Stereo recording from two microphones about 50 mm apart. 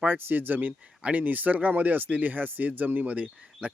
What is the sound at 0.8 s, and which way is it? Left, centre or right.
Speech, right.